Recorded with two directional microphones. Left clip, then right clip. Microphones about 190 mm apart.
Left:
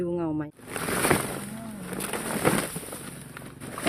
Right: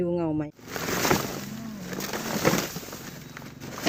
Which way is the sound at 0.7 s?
10° left (ahead or behind).